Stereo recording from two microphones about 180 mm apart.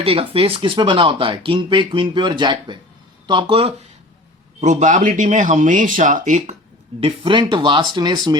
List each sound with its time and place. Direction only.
0.0 s speech: 30° right (ahead or behind)
4.6 s speech: 45° right (ahead or behind)
7.0 s speech: 30° right (ahead or behind)